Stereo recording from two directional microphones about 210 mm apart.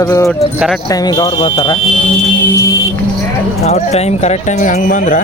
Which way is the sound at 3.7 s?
30° left (ahead or behind).